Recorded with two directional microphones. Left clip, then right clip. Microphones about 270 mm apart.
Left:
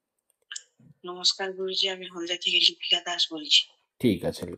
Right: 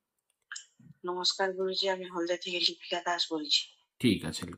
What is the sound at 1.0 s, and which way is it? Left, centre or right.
Speech, centre.